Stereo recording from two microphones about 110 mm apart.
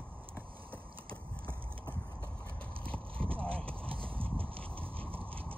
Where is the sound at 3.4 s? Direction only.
10° left (ahead or behind).